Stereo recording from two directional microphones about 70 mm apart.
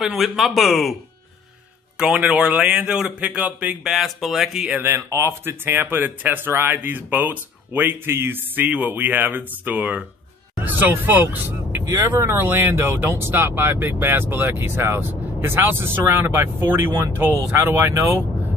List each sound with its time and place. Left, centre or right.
0.0 s speech: centre
2.0 s speech: centre
3.8 s speech: centre
4.7 s speech: right
8.6 s speech: right
11.9 s speech: right